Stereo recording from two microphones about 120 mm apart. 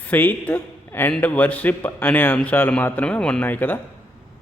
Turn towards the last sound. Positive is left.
turn(degrees=15)  # may be behind; listen again after turning